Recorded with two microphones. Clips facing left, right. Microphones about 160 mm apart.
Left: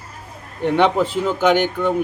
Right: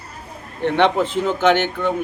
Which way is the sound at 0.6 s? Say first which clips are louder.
Left 1 dB; 10° left (ahead or behind).